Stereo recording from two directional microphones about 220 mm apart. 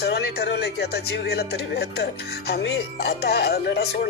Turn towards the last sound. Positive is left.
turn(degrees=50)  # may be behind; listen again after turning